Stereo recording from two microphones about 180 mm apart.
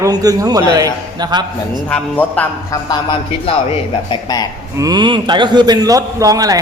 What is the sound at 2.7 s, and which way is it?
A man's voice, 25° left (ahead or behind).